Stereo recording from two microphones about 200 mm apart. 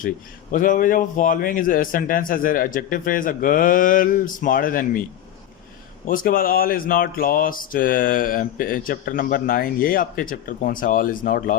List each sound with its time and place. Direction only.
0.5 s speech: 40° left (ahead or behind)
6.1 s speech: 45° left (ahead or behind)